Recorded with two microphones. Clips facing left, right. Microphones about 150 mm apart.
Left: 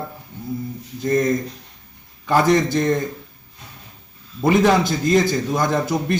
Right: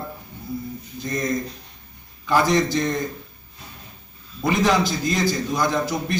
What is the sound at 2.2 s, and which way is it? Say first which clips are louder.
Speech: left 3 dB; 50° left (ahead or behind).